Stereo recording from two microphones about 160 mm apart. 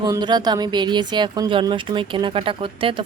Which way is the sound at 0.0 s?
25° right (ahead or behind).